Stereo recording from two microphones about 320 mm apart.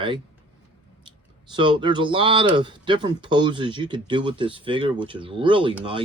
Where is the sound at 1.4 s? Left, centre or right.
Centre.